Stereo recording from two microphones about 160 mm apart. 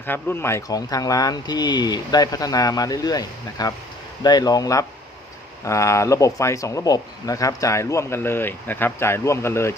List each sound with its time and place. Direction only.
0.0 s speech: 15° left (ahead or behind)